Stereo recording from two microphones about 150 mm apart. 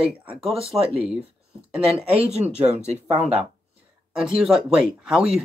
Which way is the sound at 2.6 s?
45° right (ahead or behind).